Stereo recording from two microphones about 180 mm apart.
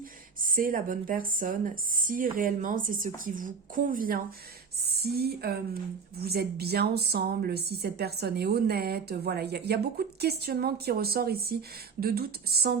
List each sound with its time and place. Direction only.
0.4 s speech: 50° right (ahead or behind)
4.9 s speech: 60° right (ahead or behind)